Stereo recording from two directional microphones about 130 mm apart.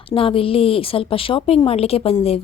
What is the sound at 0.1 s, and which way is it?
A woman's voice, 45° left (ahead or behind).